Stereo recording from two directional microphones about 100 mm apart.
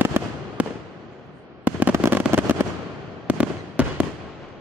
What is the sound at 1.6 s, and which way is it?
Fireworks, 15° right (ahead or behind).